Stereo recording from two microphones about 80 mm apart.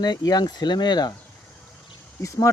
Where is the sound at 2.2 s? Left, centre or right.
Left.